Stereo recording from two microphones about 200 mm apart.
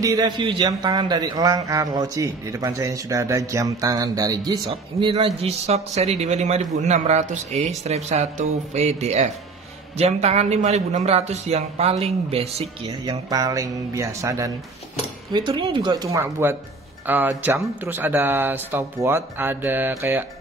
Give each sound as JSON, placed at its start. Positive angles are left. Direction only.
{"t": 0.0, "sound": "a man's voice", "side_deg": -20}
{"t": 4.6, "sound": "a man's voice", "side_deg": -30}